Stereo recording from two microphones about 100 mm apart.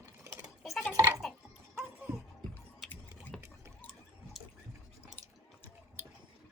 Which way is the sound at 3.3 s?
5° left (ahead or behind).